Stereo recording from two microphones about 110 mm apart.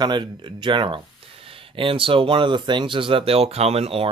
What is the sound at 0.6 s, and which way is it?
Speech, 50° right (ahead or behind).